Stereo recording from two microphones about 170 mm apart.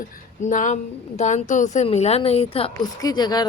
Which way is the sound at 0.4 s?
45° left (ahead or behind).